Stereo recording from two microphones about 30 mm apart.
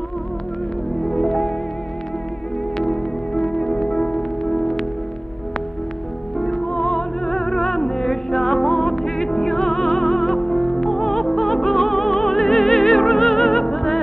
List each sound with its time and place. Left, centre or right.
1.0 s music: left
2.8 s music: centre
6.4 s music: left